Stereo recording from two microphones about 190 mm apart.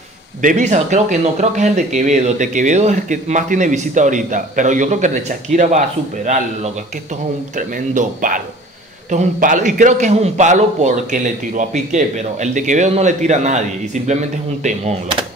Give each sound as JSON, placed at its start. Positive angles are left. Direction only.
{"t": 0.4, "sound": "speech", "side_deg": -40}